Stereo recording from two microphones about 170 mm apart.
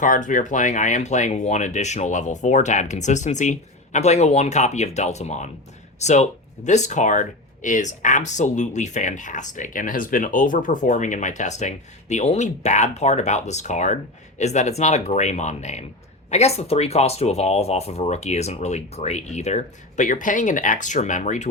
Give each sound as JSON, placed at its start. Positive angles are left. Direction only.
{"t": 0.0, "sound": "speech", "side_deg": 50}